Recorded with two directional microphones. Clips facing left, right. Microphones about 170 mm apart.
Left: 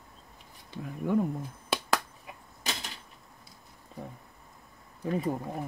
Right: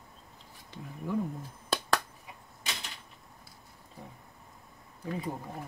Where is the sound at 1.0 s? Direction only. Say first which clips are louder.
Left 5 dB; 70° left (ahead or behind).